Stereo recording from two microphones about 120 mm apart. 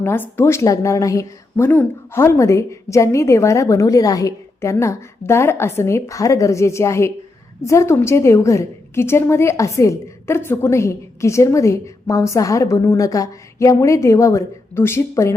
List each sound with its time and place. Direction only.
0.0 s a woman's voice: 20° left (ahead or behind)